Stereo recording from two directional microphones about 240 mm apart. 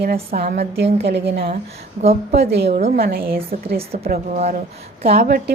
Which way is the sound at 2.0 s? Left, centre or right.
Right.